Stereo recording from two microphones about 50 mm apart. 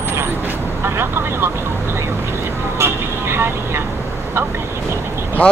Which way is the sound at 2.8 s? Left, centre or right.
Right.